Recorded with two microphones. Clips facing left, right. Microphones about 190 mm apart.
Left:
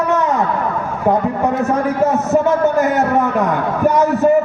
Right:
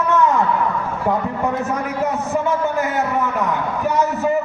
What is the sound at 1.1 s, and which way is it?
A man's voice, 40° left (ahead or behind).